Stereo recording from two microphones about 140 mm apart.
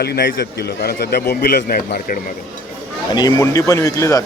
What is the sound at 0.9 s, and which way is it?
Speech, 90° left.